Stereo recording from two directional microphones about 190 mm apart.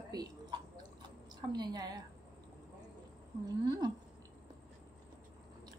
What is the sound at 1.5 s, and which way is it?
Speech, 20° right (ahead or behind).